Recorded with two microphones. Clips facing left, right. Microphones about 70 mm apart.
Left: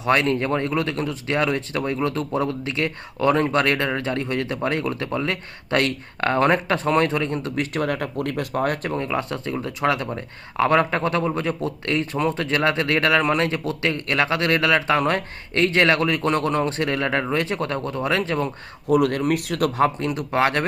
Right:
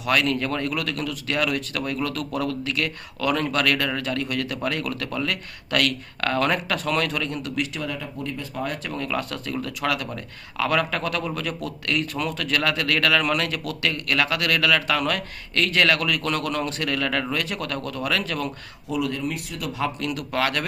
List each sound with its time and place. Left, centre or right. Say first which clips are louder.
0.0 s speech: left 3 dB; left
8.9 s speech: left 3 dB; left
18.9 s speech: left 8 dB; left
20.0 s speech: left 4 dB; left